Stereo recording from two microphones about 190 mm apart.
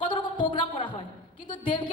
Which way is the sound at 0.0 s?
25° left (ahead or behind).